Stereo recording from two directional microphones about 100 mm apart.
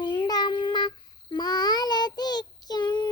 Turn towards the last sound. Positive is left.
turn(degrees=50)  # may be behind; listen again after turning